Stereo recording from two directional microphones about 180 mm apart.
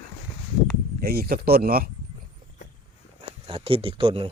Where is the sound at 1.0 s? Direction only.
60° right (ahead or behind).